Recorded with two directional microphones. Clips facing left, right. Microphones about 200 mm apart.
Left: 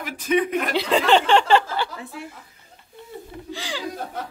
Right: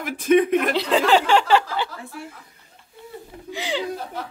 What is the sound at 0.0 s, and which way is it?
Speech, 50° right (ahead or behind).